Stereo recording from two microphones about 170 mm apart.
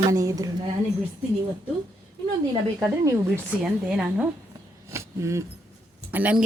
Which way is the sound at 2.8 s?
15° right (ahead or behind).